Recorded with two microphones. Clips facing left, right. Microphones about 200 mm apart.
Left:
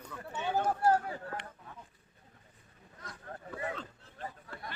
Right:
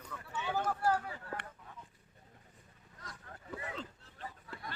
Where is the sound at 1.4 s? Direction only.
60° right (ahead or behind).